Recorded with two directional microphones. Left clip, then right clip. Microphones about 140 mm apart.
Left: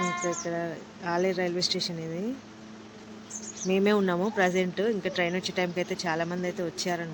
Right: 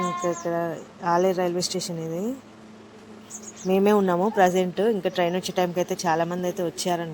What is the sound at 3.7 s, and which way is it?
A woman's voice, 10° right (ahead or behind).